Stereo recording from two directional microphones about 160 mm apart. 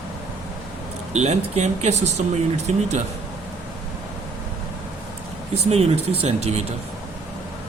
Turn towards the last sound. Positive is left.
turn(degrees=-40)  # may be behind; listen again after turning